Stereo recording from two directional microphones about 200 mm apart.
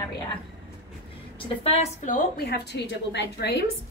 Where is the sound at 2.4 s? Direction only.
55° left (ahead or behind).